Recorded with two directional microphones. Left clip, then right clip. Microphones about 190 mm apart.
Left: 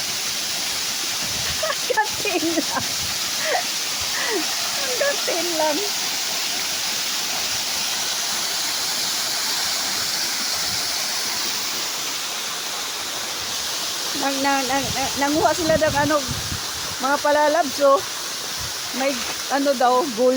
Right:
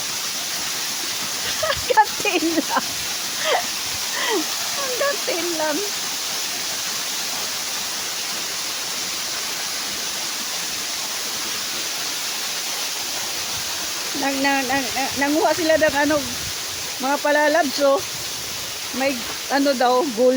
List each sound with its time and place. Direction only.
1.6 s speech: 30° right (ahead or behind)
14.3 s speech: 20° right (ahead or behind)
17.1 s speech: 25° right (ahead or behind)
19.5 s speech: 25° right (ahead or behind)